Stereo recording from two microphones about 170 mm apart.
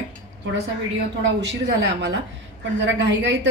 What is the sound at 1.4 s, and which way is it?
A woman's voice, 90° right.